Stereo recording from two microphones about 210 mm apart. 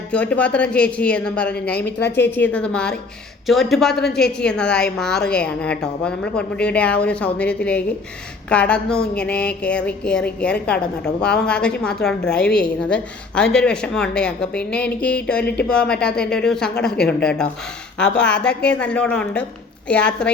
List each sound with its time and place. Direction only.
0.1 s a woman's voice: 5° left (ahead or behind)
1.7 s a woman's voice: 50° left (ahead or behind)
2.1 s a woman's voice: 10° left (ahead or behind)
17.9 s a woman's voice: 5° left (ahead or behind)